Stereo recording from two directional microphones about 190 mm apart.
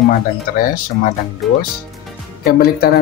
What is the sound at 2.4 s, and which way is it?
Speech, 55° left (ahead or behind).